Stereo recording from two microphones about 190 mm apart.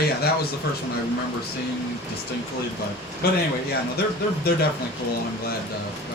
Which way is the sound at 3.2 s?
55° left (ahead or behind).